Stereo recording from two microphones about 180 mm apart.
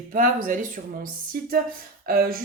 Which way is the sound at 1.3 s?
50° right (ahead or behind).